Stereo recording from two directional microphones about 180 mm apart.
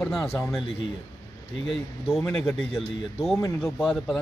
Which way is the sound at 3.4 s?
15° left (ahead or behind).